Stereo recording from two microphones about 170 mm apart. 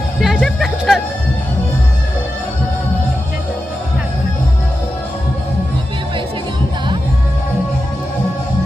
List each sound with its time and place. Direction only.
0.2 s music: centre (ahead or behind)